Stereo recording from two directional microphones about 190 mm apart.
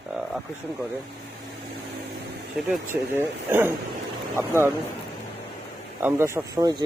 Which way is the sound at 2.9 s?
10° right (ahead or behind).